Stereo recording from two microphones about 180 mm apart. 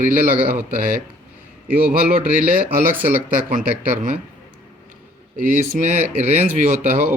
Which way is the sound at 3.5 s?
50° right (ahead or behind).